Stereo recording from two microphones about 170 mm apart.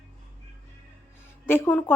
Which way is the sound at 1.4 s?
10° left (ahead or behind).